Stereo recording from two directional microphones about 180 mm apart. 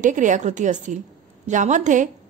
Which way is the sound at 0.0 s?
45° right (ahead or behind).